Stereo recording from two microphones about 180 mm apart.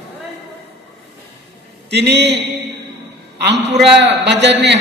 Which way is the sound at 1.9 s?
70° right (ahead or behind).